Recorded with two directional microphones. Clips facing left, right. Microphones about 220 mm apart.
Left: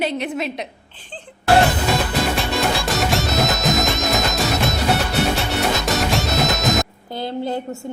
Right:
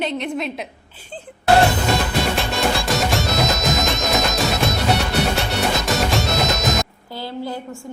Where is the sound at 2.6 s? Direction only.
Centre (ahead or behind).